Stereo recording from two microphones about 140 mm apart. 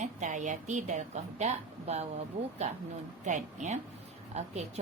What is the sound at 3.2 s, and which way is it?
A woman's voice, 60° right (ahead or behind).